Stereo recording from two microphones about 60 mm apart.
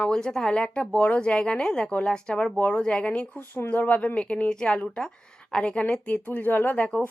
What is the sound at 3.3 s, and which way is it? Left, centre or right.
Speech, left.